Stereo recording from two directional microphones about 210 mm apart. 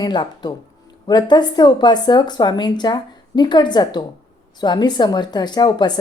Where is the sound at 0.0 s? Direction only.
20° left (ahead or behind).